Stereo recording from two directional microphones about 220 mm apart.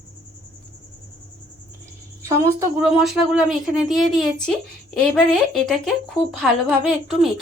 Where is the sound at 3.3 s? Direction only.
Centre (ahead or behind).